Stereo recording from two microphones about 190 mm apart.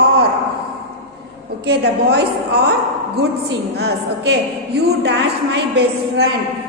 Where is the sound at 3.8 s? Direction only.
60° right (ahead or behind).